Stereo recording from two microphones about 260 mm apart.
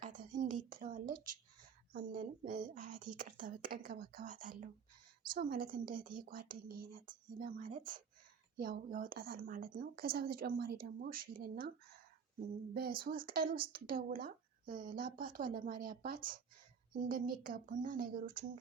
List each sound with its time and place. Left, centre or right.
0.0 s a sound: right
1.9 s a woman's voice: right
13.0 s a woman's voice: right